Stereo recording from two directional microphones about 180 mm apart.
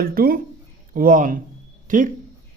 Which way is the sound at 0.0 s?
55° right (ahead or behind).